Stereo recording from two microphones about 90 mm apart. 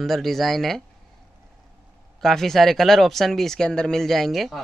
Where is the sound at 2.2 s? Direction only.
5° left (ahead or behind).